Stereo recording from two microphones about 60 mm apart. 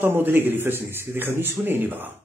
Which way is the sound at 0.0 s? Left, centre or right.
Right.